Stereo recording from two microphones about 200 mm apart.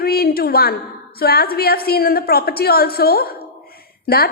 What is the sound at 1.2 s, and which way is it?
A woman's voice, 50° left (ahead or behind).